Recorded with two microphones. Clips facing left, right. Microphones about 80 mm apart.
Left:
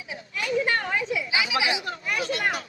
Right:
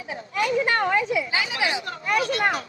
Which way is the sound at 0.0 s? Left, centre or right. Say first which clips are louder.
Right 7 dB; right.